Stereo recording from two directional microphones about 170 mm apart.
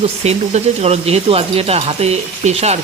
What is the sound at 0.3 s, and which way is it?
Speech, 40° right (ahead or behind).